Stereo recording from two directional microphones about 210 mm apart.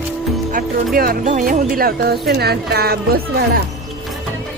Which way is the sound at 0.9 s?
40° right (ahead or behind).